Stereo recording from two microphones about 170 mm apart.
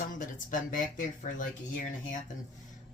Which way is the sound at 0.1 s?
50° left (ahead or behind).